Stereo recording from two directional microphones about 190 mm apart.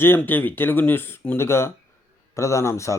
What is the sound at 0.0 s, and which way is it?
Speech, 10° left (ahead or behind).